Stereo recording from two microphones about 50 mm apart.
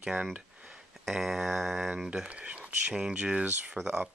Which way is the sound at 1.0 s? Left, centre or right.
Centre.